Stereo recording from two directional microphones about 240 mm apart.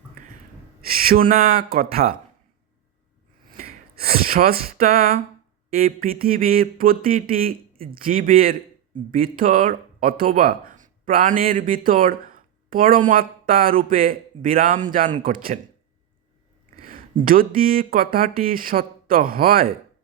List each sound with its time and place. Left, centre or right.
0.9 s speech: right
3.5 s a sound: right
5.7 s speech: right
16.7 s speech: right